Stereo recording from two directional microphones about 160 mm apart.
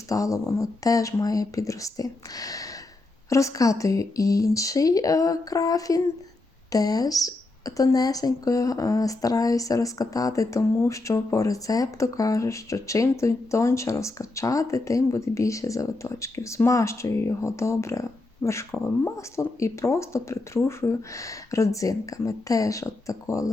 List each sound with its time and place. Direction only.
0.1 s speech: 20° left (ahead or behind)